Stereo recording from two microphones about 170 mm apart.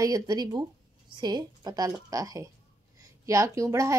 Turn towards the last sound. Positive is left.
turn(degrees=-20)  # may be behind; listen again after turning